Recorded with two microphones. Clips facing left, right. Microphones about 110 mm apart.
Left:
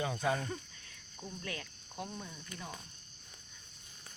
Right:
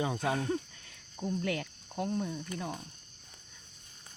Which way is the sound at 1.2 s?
90° right.